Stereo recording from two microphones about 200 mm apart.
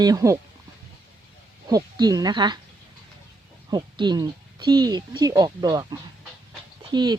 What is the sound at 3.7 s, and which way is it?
Speech, 20° right (ahead or behind).